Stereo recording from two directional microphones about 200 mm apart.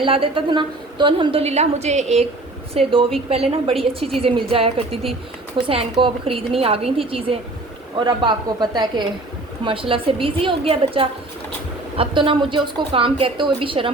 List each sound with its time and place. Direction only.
0.0 s a woman's voice: 25° right (ahead or behind)